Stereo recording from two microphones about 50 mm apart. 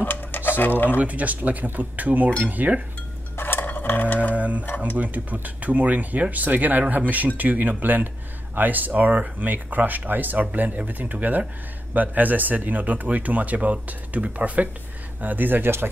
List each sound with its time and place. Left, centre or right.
0.0 s a sound: left
0.8 s speech: right
3.3 s cutlery: left
4.4 s speech: right